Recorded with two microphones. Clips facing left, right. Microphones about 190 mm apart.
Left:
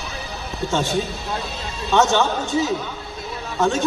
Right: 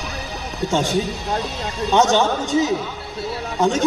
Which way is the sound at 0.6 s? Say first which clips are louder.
Right 2 dB; 15° right (ahead or behind).